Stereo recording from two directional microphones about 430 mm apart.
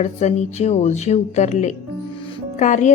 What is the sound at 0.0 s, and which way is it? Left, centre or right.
A woman's voice, centre.